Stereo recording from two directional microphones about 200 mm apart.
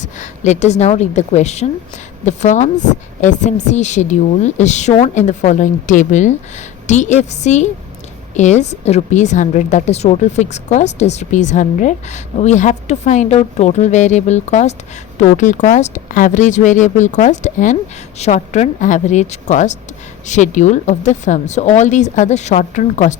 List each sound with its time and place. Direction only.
0.0 s a woman's voice: 35° left (ahead or behind)